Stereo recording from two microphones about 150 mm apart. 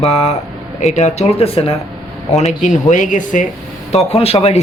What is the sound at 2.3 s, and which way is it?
Speech, 50° left (ahead or behind).